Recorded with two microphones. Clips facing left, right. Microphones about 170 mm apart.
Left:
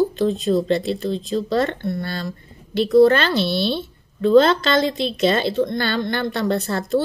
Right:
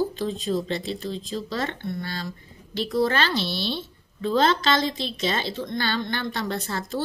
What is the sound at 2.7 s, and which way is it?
A woman's voice, 60° left (ahead or behind).